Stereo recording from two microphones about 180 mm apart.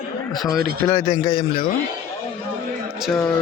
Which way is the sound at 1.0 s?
45° left (ahead or behind).